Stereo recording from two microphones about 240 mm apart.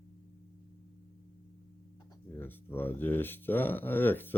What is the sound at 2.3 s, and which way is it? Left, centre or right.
Speech, centre.